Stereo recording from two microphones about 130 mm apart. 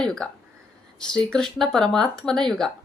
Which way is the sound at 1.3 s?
5° left (ahead or behind).